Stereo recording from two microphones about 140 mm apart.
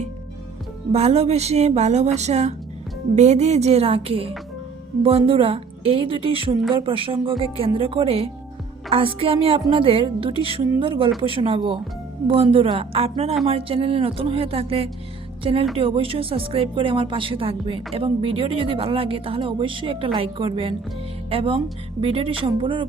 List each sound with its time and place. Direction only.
0.9 s a woman's voice: 50° right (ahead or behind)